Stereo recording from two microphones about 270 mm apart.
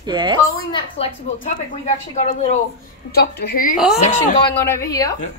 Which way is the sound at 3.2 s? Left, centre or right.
Left.